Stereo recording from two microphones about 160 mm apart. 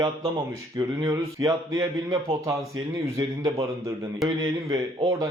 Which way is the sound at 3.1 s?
20° right (ahead or behind).